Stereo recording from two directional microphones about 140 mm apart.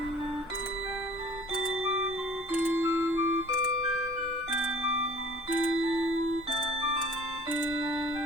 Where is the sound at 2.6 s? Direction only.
15° right (ahead or behind).